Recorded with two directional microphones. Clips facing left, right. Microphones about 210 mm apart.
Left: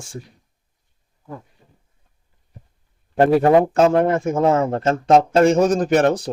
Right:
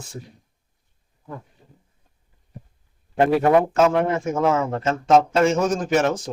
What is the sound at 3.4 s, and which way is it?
A man's voice, 30° left (ahead or behind).